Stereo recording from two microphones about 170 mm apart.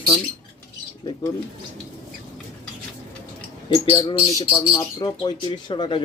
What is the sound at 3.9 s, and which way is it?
Speech, 20° left (ahead or behind).